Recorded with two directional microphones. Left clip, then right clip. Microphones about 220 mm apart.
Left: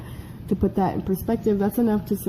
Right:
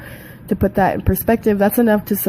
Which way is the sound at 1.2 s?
45° right (ahead or behind).